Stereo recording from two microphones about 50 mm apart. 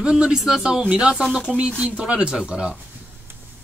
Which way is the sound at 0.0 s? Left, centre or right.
Centre.